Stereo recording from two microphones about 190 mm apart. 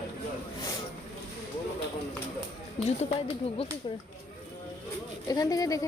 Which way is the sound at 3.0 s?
30° left (ahead or behind).